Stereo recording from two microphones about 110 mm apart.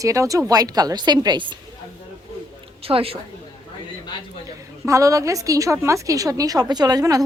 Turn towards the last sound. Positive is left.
turn(degrees=-35)  # may be behind; listen again after turning